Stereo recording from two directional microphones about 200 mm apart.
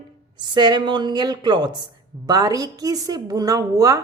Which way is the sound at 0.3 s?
20° right (ahead or behind).